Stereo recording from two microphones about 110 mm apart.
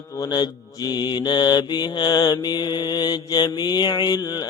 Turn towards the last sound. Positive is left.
turn(degrees=35)  # may be behind; listen again after turning